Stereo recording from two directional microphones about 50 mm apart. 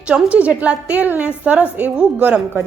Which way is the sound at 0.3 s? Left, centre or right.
Right.